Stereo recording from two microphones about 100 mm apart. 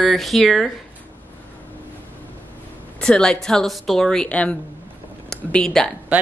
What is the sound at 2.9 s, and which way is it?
A woman's voice, 5° left (ahead or behind).